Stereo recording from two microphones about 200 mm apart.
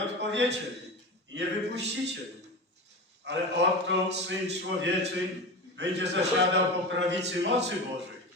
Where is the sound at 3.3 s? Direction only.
60° right (ahead or behind).